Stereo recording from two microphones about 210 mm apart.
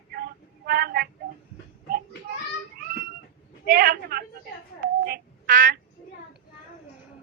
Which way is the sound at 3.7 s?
45° right (ahead or behind).